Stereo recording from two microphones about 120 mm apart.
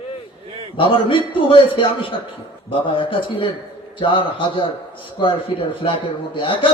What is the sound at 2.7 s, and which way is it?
A man's voice, 45° left (ahead or behind).